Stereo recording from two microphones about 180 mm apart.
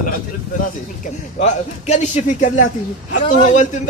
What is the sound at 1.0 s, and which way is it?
Speech, 40° left (ahead or behind).